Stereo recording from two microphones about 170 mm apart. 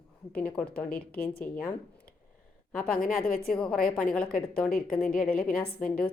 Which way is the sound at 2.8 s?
55° left (ahead or behind).